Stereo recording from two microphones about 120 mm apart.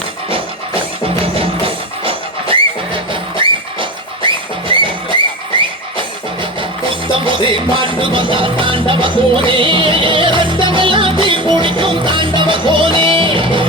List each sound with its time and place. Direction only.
0.3 s music: 50° right (ahead or behind)
7.1 s music: 45° right (ahead or behind)